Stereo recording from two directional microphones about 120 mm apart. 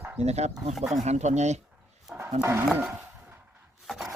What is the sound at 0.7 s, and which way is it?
Speech, centre (ahead or behind).